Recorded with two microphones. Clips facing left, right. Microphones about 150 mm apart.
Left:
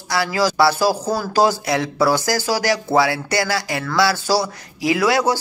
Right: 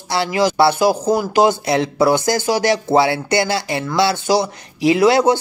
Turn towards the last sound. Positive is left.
turn(degrees=-25)  # may be behind; listen again after turning